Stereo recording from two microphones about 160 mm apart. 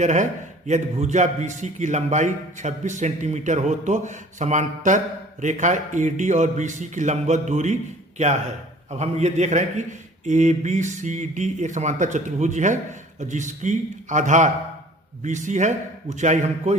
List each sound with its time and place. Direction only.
0.0 s a man's voice: 50° right (ahead or behind)